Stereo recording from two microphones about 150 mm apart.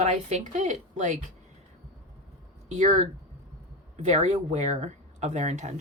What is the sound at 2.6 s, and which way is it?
Speech, 50° right (ahead or behind).